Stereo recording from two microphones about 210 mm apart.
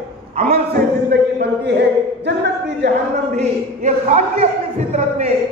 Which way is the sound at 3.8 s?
35° right (ahead or behind).